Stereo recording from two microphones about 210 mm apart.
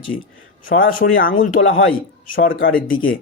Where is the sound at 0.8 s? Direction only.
45° left (ahead or behind).